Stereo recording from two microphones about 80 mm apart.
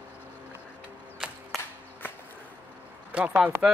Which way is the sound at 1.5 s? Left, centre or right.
Centre.